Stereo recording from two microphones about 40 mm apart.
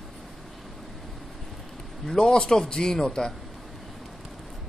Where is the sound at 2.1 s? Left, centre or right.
Centre.